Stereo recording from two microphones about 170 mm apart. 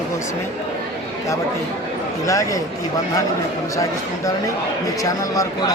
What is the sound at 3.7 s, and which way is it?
Speech, 20° left (ahead or behind).